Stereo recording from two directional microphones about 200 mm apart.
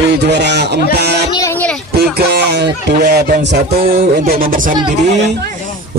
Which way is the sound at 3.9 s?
45° right (ahead or behind).